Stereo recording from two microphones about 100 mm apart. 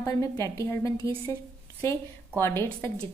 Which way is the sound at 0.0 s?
30° left (ahead or behind).